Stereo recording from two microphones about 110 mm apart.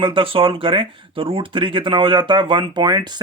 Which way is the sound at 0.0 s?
50° right (ahead or behind).